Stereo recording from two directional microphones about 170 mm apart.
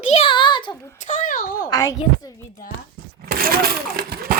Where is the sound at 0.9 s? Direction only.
45° left (ahead or behind).